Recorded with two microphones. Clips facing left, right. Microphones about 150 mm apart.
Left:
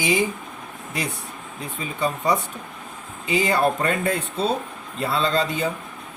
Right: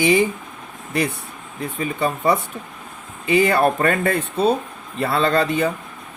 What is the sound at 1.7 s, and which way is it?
Speech, 60° right (ahead or behind).